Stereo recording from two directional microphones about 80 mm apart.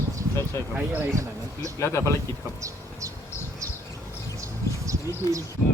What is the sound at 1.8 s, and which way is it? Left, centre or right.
Speech, left.